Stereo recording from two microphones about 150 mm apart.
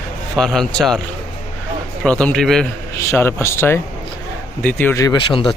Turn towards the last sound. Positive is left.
turn(degrees=35)  # may be behind; listen again after turning